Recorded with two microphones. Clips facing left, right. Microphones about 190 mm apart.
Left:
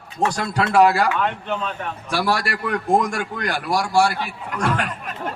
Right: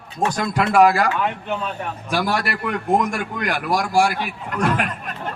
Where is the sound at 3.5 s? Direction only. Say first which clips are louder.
Right 1 dB; 35° left (ahead or behind).